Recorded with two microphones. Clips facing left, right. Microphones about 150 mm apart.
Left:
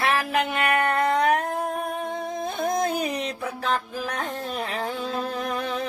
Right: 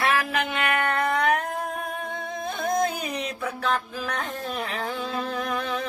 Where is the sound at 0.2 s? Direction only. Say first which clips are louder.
Left 2 dB; 40° left (ahead or behind).